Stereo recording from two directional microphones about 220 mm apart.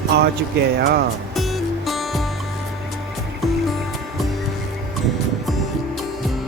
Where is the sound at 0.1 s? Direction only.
45° right (ahead or behind).